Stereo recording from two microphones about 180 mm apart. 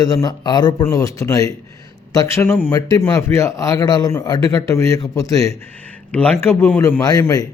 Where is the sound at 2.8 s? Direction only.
20° left (ahead or behind).